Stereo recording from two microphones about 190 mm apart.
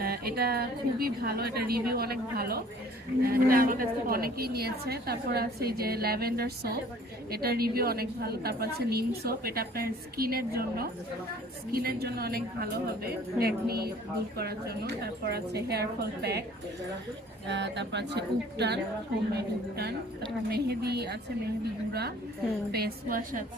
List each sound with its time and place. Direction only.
0.0 s a woman's voice: 55° right (ahead or behind)
17.5 s a woman's voice: 65° right (ahead or behind)
22.7 s a woman's voice: 50° right (ahead or behind)